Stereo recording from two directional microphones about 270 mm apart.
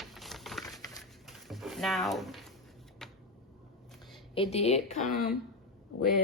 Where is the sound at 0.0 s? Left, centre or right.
Centre.